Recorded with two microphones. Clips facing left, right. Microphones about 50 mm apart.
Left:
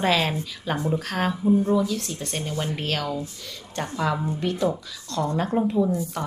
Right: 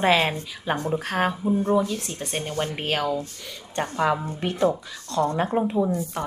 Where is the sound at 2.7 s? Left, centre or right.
Centre; by 5.3 s right.